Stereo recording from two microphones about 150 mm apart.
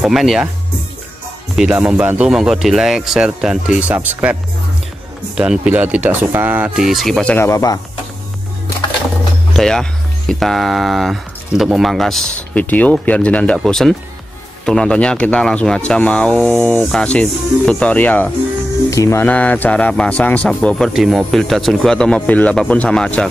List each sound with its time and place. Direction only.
0.0 s speech: centre (ahead or behind)
1.6 s speech: 5° right (ahead or behind)
7.3 s speech: 20° left (ahead or behind)
9.6 s speech: 5° left (ahead or behind)